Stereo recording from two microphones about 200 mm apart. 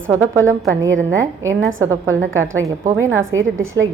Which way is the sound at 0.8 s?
70° right (ahead or behind).